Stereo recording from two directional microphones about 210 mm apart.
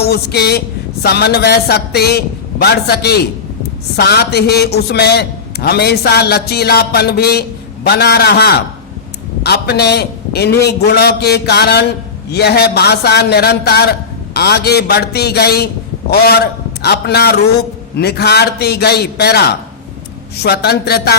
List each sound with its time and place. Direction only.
0.0 s a man's voice: 50° left (ahead or behind)